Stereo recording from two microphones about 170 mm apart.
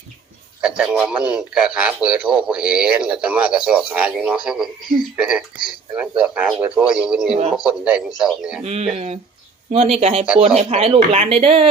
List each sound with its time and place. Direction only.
0.6 s speech: 5° right (ahead or behind)
8.6 s speech: 40° right (ahead or behind)